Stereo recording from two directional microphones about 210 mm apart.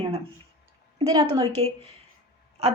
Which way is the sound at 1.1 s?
25° right (ahead or behind).